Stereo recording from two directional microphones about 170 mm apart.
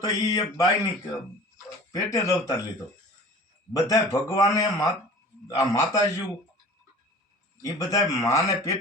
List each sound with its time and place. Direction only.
0.0 s a man's voice: 20° left (ahead or behind)
1.9 s a man's voice: 20° left (ahead or behind)
3.7 s a man's voice: 20° left (ahead or behind)
7.6 s a man's voice: 20° left (ahead or behind)